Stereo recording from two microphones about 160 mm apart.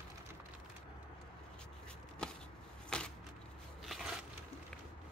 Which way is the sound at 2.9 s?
5° left (ahead or behind).